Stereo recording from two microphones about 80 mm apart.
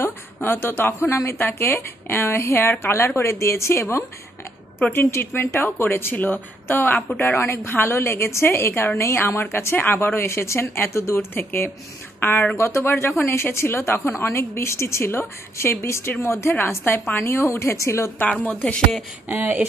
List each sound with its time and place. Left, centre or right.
0.0 s a woman's voice: left
4.7 s a woman's voice: left
12.5 s a woman's voice: left
18.3 s a woman's voice: left
19.2 s speech: right